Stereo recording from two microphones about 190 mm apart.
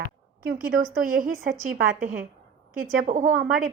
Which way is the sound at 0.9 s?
50° right (ahead or behind).